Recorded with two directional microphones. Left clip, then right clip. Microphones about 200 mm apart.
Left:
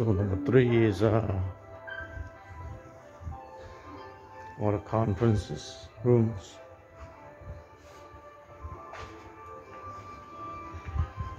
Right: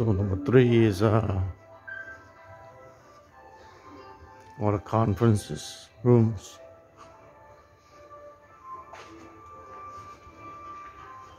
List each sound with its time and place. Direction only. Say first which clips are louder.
0.0 s speech: right 1 dB; 15° right (ahead or behind)
4.6 s speech: right 3 dB; 25° right (ahead or behind)